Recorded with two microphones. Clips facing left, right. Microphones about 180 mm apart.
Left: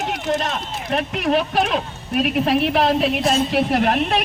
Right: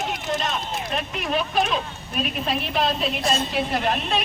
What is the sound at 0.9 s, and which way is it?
A woman's voice, 70° left (ahead or behind).